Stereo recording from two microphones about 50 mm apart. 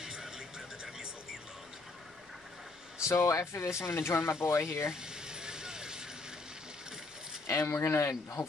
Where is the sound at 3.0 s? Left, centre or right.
Left.